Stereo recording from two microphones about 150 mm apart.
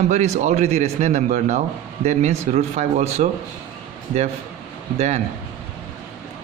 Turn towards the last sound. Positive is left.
turn(degrees=-50)  # may be behind; listen again after turning